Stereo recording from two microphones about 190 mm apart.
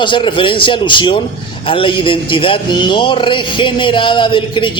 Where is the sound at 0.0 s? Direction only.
25° left (ahead or behind).